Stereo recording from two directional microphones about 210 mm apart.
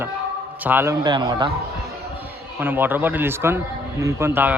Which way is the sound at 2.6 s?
10° right (ahead or behind).